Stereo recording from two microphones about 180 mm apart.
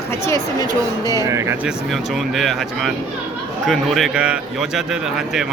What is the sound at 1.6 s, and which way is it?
A man's voice, centre (ahead or behind).